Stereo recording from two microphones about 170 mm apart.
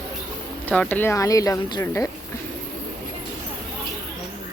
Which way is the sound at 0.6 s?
10° left (ahead or behind).